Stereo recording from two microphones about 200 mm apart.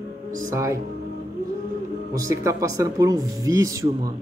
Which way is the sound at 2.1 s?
15° right (ahead or behind).